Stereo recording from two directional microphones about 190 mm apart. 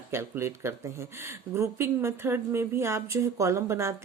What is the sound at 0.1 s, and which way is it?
Speech, 15° right (ahead or behind).